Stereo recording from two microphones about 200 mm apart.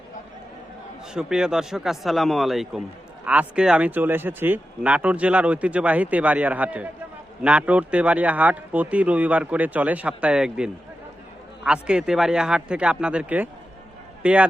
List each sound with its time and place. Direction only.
1.1 s a man's voice: 5° right (ahead or behind)